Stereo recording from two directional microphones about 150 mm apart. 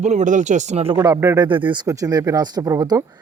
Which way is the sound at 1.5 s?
35° right (ahead or behind).